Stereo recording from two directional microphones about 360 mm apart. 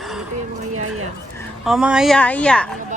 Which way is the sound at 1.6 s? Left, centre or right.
Centre.